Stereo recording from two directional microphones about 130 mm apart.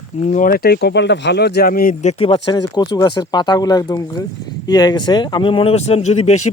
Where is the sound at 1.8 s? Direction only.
90° left.